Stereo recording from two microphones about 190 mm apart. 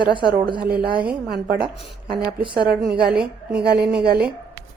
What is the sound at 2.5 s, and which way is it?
Speech, 55° right (ahead or behind).